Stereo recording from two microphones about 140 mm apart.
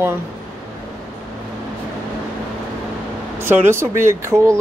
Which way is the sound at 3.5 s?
20° right (ahead or behind).